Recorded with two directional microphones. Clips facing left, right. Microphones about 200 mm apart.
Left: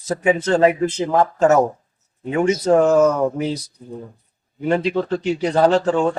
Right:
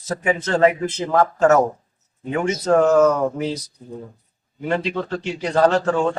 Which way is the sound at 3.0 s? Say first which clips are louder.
Left 1 dB; 10° left (ahead or behind).